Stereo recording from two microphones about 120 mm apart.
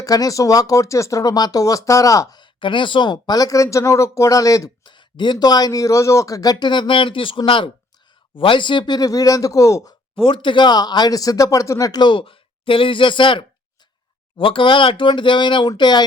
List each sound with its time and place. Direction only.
0.0 s speech: 30° left (ahead or behind)
4.9 s speech: 40° left (ahead or behind)
10.2 s speech: 45° left (ahead or behind)